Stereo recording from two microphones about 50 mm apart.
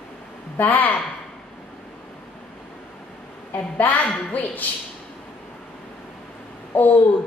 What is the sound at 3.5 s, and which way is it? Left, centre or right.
A woman's voice, left.